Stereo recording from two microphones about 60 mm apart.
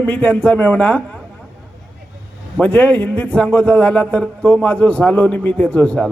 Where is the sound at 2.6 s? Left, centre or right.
Left.